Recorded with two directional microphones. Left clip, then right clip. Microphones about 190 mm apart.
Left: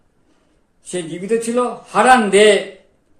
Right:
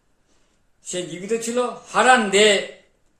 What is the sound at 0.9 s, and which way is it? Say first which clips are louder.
A man's voice: left 5 dB; 5° left (ahead or behind).